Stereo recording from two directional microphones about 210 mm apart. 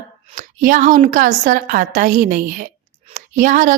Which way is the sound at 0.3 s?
40° right (ahead or behind).